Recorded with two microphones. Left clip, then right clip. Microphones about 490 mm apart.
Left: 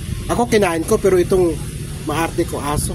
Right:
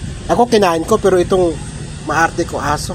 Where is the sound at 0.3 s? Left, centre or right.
Left.